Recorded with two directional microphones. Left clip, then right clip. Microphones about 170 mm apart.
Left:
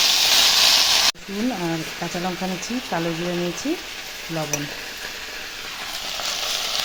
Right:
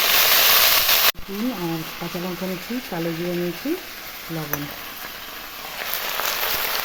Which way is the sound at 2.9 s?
10° left (ahead or behind).